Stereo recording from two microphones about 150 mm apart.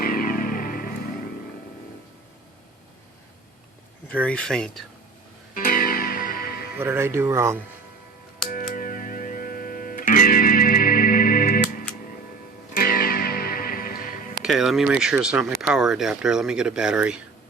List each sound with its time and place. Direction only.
0.0 s music: 70° left (ahead or behind)
4.1 s speech: 10° left (ahead or behind)
5.5 s music: 70° left (ahead or behind); by 6.7 s 90° left
6.7 s speech: 15° right (ahead or behind)
8.4 s music: 70° left (ahead or behind)
14.4 s speech: centre (ahead or behind)